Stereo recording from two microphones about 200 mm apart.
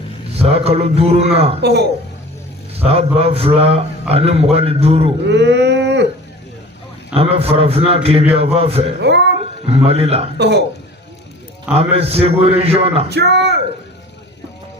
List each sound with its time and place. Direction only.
0.3 s a man's voice: 30° right (ahead or behind)
1.6 s speech: 55° right (ahead or behind)
2.8 s a man's voice: 30° right (ahead or behind)
5.2 s a sound: 60° right (ahead or behind)
7.1 s a man's voice: 30° right (ahead or behind)
9.0 s speech: 60° right (ahead or behind)
9.6 s a man's voice: 30° right (ahead or behind)
10.3 s speech: 55° right (ahead or behind)
11.7 s a man's voice: 30° right (ahead or behind)
13.1 s speech: 55° right (ahead or behind)